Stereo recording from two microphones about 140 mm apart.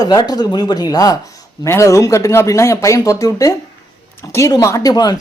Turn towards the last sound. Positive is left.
turn(degrees=30)  # may be behind; listen again after turning